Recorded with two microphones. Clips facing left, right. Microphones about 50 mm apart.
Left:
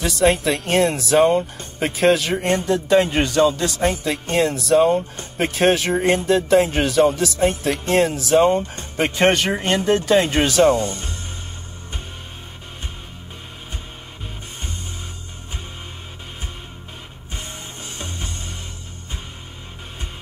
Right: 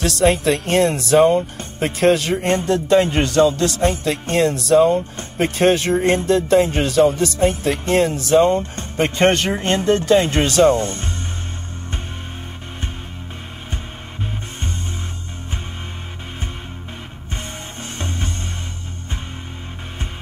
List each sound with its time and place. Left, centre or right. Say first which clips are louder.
0.0 s speech: right 1 dB; centre
10.8 s speech: right 1 dB; right
17.9 s music: right 6 dB; right